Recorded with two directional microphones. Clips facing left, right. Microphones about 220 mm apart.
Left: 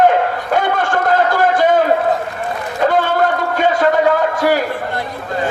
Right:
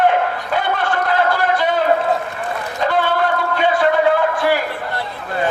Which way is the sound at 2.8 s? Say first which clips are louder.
Left 4 dB; 45° left (ahead or behind).